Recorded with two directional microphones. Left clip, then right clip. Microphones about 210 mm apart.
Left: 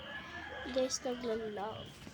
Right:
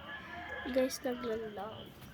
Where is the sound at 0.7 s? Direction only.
20° right (ahead or behind).